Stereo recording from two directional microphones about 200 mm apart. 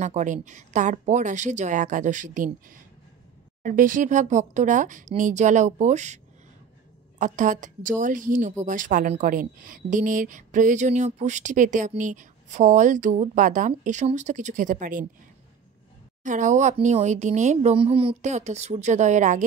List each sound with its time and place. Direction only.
0.0 s a woman's voice: 35° right (ahead or behind)
3.6 s a woman's voice: 40° right (ahead or behind)
7.2 s a woman's voice: 40° right (ahead or behind)
16.3 s a woman's voice: 40° right (ahead or behind)